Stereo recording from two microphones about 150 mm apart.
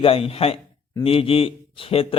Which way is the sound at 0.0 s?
40° left (ahead or behind).